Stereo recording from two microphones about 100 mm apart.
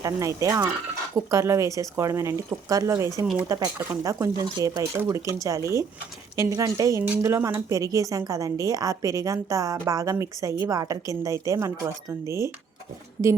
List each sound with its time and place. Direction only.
0.0 s a woman's voice: 30° right (ahead or behind)